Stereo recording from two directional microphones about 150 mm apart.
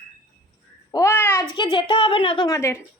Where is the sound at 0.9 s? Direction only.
20° left (ahead or behind).